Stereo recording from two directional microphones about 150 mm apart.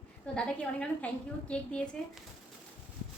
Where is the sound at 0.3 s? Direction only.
5° left (ahead or behind).